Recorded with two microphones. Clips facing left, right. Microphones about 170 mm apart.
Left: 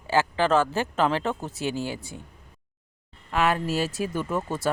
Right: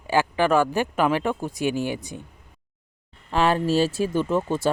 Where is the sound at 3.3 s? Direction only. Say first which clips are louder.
Right 4 dB; 30° right (ahead or behind).